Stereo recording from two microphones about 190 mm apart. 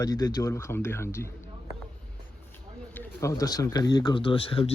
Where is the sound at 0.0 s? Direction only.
20° left (ahead or behind).